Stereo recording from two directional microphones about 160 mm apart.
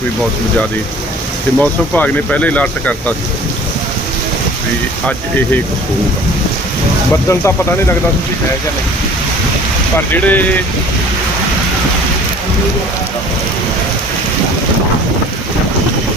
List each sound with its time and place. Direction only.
1.5 s speech: 10° left (ahead or behind)
7.3 s speech: 15° left (ahead or behind)
10.1 s speech: 10° left (ahead or behind)